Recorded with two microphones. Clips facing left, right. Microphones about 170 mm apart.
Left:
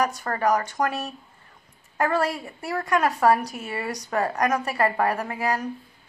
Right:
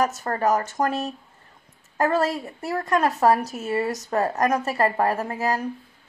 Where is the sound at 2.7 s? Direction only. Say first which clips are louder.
Right 1 dB; 25° right (ahead or behind).